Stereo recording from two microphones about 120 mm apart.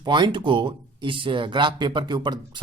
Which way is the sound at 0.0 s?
40° right (ahead or behind).